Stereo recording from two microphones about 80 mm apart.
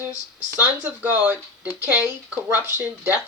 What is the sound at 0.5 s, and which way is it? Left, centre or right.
Speech, centre.